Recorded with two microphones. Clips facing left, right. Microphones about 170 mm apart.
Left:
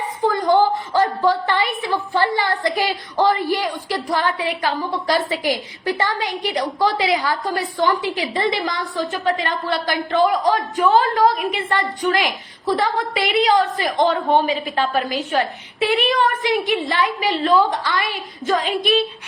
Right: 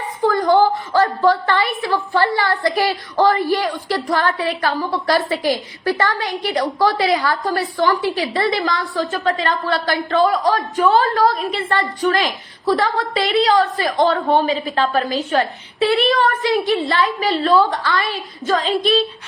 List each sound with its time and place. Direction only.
0.2 s a woman's voice: 20° left (ahead or behind)